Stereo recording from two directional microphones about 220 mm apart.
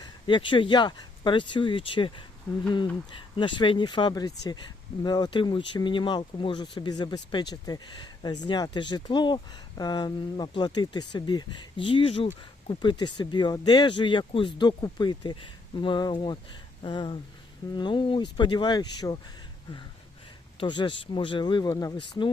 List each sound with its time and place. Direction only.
0.0 s speech: 20° left (ahead or behind)
20.6 s speech: 20° left (ahead or behind)